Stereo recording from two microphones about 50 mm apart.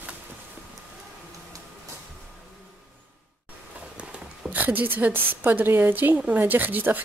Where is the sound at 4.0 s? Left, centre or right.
Right.